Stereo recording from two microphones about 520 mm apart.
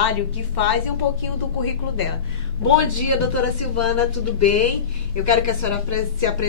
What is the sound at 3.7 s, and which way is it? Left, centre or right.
A woman's voice, left.